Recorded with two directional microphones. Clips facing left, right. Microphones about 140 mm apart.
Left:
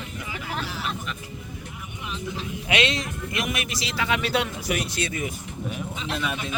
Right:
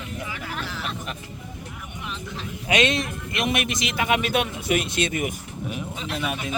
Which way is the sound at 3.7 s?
20° right (ahead or behind).